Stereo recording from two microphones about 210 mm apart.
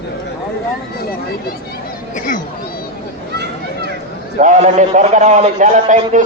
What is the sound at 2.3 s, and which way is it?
Chatter, 40° left (ahead or behind).